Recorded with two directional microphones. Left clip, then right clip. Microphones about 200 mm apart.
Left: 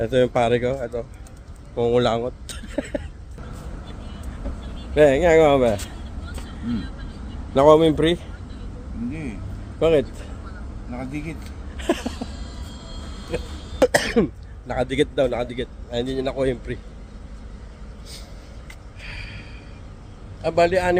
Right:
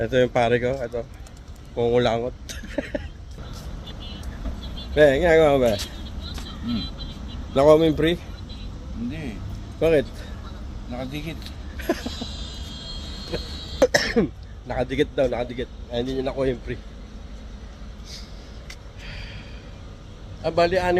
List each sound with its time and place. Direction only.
0.0 s speech: 5° left (ahead or behind)
4.9 s speech: 10° left (ahead or behind)
7.5 s speech: 10° left (ahead or behind)
9.8 s a man's voice: 10° left (ahead or behind)
11.8 s a sound: 15° left (ahead or behind)
13.3 s cough: 5° left (ahead or behind)
14.7 s a man's voice: 5° left (ahead or behind)
19.0 s a sound: 10° left (ahead or behind)
20.4 s speech: 5° left (ahead or behind)